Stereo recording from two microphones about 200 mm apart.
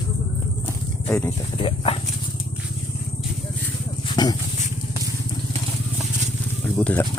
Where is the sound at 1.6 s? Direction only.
25° left (ahead or behind).